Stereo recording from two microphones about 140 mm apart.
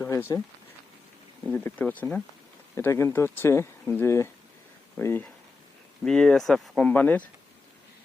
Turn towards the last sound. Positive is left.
turn(degrees=10)  # may be behind; listen again after turning